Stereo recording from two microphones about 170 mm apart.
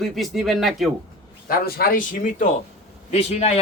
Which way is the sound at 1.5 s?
65° left (ahead or behind).